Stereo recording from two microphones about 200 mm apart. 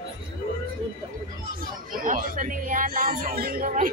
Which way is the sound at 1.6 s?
45° right (ahead or behind).